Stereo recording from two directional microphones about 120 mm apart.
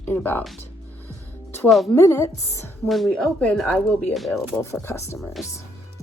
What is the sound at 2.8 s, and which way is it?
Speech, centre (ahead or behind).